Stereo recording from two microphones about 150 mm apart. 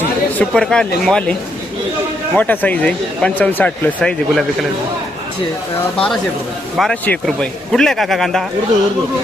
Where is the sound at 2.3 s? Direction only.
10° left (ahead or behind).